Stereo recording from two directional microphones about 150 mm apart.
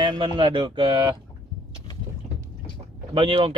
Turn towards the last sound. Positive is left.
turn(degrees=-35)  # may be behind; listen again after turning